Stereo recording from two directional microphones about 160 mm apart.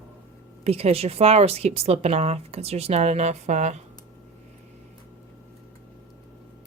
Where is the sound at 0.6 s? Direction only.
40° right (ahead or behind).